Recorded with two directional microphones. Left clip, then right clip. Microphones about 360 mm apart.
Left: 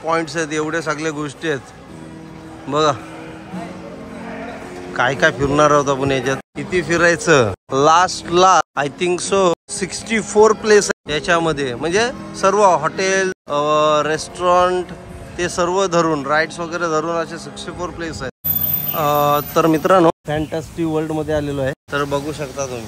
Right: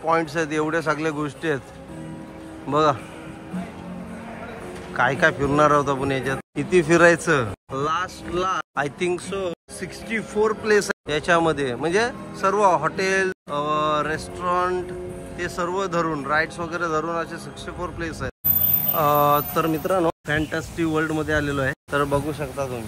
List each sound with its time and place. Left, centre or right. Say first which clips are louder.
0.0 s a man's voice: left 2 dB; centre
2.7 s a man's voice: left 3 dB; centre
4.9 s a man's voice: left 4 dB; centre
19.8 s a man's voice: left 9 dB; left
20.2 s a man's voice: left 2 dB; centre